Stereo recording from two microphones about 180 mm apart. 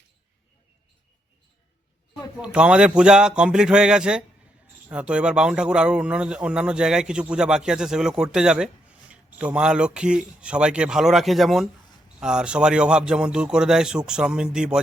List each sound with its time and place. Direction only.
2.4 s speech: 5° right (ahead or behind)